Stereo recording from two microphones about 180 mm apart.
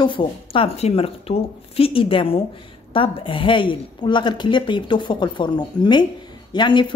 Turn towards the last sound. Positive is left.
turn(degrees=25)  # may be behind; listen again after turning